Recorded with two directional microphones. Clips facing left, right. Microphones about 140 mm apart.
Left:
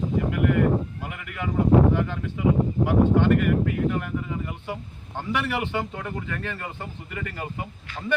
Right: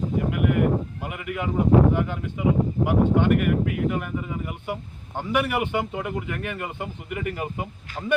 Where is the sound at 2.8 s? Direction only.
15° right (ahead or behind).